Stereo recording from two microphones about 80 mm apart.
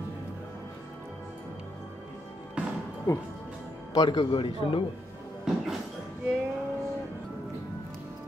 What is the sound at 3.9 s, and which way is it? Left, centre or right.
Speech, left.